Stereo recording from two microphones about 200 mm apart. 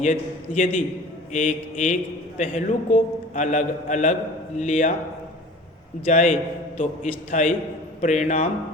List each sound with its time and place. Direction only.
0.0 s a man's voice: 40° left (ahead or behind)
6.1 s a man's voice: 35° left (ahead or behind)